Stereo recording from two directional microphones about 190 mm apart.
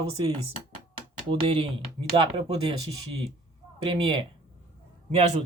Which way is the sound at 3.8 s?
30° right (ahead or behind).